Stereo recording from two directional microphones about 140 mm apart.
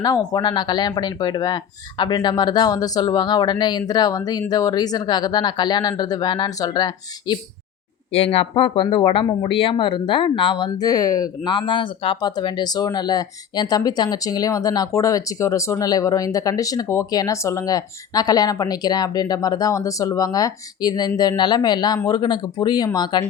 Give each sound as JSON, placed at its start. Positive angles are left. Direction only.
{"t": 0.0, "sound": "speech", "side_deg": 30}
{"t": 8.1, "sound": "speech", "side_deg": 45}